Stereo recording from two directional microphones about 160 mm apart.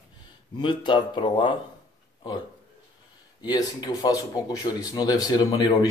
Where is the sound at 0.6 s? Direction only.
30° left (ahead or behind).